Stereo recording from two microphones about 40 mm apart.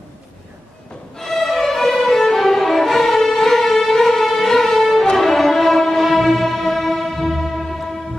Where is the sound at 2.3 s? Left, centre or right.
Centre.